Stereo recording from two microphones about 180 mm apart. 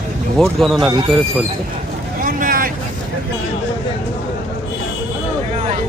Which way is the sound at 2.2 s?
50° right (ahead or behind).